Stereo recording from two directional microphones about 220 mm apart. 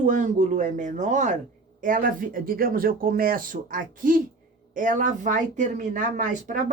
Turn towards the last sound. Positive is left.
turn(degrees=-35)  # may be behind; listen again after turning